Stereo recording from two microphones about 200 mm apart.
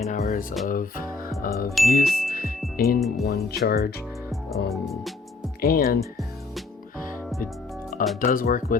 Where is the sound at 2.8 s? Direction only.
50° left (ahead or behind).